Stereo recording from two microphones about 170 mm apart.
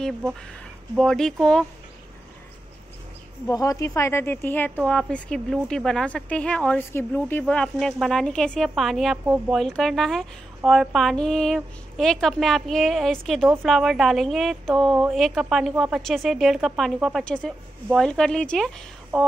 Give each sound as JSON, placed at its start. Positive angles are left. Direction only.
{"t": 0.9, "sound": "a woman's voice", "side_deg": 5}
{"t": 3.4, "sound": "a woman's voice", "side_deg": 20}